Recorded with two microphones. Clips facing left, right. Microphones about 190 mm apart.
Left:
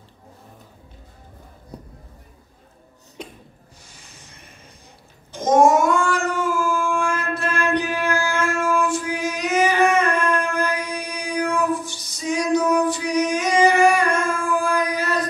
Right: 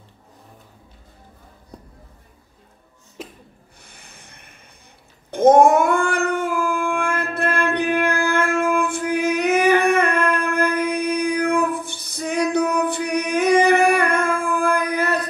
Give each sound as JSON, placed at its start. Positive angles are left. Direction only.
{"t": 3.2, "sound": "a sound", "side_deg": -5}
{"t": 3.8, "sound": "snort", "side_deg": -60}
{"t": 5.3, "sound": "howl", "side_deg": -60}